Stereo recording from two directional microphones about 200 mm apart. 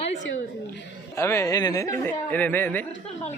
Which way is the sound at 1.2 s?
15° left (ahead or behind).